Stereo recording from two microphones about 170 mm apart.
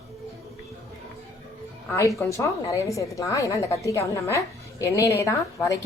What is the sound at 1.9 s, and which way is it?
A woman's voice, 20° left (ahead or behind).